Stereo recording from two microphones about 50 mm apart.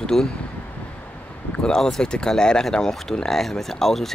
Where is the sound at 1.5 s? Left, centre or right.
Centre.